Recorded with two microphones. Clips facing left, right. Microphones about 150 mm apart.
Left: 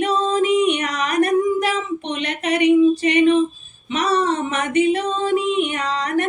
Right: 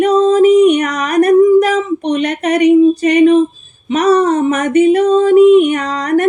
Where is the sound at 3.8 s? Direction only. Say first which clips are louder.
Right 9 dB; 40° right (ahead or behind).